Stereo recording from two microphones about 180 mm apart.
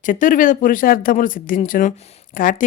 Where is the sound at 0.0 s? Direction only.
45° left (ahead or behind).